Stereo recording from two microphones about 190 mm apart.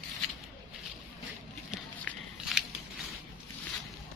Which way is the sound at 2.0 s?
Centre (ahead or behind).